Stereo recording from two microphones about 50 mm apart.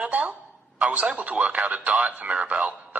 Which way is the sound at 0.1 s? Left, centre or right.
Right.